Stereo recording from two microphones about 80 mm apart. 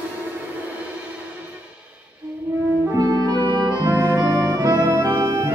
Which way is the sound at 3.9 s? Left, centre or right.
Right.